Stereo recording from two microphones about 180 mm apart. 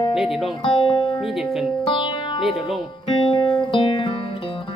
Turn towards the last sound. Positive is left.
turn(degrees=25)  # may be behind; listen again after turning